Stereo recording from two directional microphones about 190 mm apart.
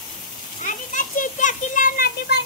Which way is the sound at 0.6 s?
40° left (ahead or behind).